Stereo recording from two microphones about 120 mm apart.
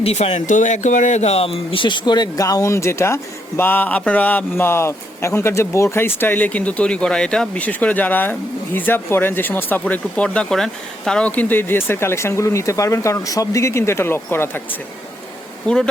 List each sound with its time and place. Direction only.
0.0 s a man's voice: 55° left (ahead or behind); by 14.6 s 20° left (ahead or behind)
15.6 s speech: 5° left (ahead or behind)